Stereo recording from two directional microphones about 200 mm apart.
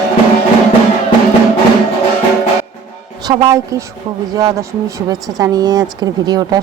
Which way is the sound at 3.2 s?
20° right (ahead or behind).